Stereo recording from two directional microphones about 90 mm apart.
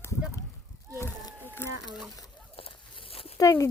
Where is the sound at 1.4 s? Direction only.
25° left (ahead or behind).